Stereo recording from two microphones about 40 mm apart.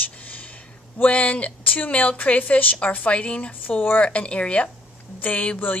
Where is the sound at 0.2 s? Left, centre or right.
Left.